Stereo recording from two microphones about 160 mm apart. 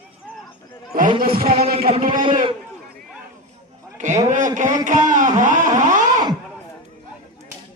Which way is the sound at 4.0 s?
50° right (ahead or behind).